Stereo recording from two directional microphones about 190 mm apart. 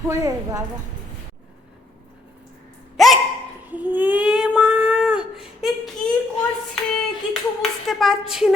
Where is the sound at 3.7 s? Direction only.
10° right (ahead or behind).